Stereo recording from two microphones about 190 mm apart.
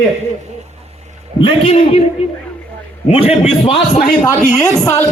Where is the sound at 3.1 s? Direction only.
35° left (ahead or behind).